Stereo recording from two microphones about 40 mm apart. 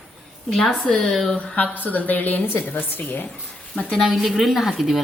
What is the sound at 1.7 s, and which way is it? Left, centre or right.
Speech, left.